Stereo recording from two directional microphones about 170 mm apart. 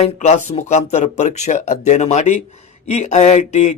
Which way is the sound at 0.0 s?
40° left (ahead or behind).